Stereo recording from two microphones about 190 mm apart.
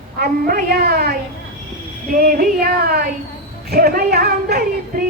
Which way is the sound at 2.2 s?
50° right (ahead or behind).